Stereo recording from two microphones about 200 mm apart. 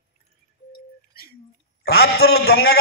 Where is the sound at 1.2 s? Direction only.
50° left (ahead or behind).